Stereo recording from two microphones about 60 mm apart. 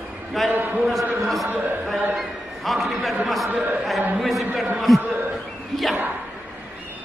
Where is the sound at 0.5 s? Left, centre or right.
Right.